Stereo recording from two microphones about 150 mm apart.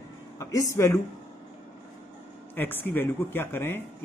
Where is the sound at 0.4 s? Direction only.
20° left (ahead or behind).